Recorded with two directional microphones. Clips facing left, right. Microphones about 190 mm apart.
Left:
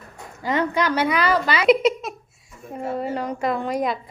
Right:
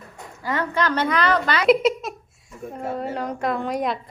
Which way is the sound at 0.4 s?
15° left (ahead or behind).